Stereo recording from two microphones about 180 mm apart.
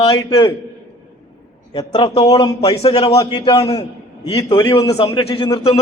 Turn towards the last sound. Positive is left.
turn(degrees=25)  # may be behind; listen again after turning